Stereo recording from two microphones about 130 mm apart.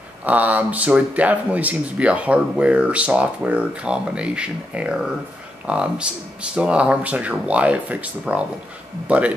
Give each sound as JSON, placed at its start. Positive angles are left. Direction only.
{"t": 0.2, "sound": "speech", "side_deg": -10}